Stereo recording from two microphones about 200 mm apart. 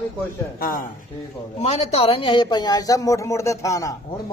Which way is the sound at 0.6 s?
45° left (ahead or behind).